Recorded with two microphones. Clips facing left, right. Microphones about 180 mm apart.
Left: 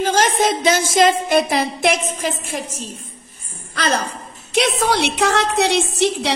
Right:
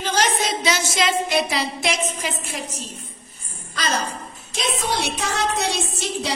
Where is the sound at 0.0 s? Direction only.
50° left (ahead or behind).